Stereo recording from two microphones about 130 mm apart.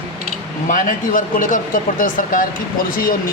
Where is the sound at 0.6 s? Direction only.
90° left.